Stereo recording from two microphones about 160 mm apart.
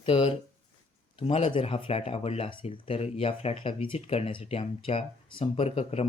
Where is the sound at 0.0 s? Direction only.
40° left (ahead or behind).